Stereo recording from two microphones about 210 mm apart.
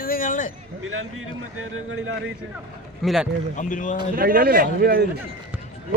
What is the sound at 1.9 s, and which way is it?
Speech, 70° right (ahead or behind).